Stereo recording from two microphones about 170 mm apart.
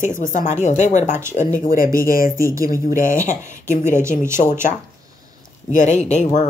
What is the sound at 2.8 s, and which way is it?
Speech, 50° left (ahead or behind).